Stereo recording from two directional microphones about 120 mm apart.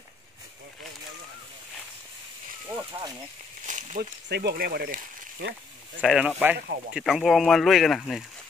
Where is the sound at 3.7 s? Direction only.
90° right.